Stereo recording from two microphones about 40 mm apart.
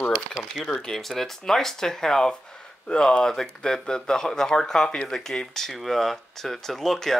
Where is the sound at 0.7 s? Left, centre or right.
Centre.